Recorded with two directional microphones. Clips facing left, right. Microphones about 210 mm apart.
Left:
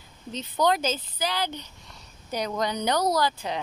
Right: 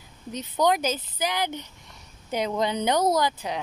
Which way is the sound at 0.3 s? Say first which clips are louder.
Right 1 dB; 15° right (ahead or behind).